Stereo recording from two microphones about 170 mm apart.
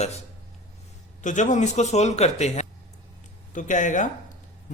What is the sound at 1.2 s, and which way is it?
A man's voice, 45° left (ahead or behind).